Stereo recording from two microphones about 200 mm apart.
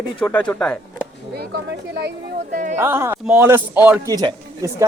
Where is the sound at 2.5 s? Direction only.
40° right (ahead or behind).